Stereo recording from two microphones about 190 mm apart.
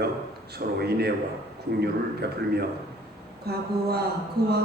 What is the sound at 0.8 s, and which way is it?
Speech, 55° right (ahead or behind).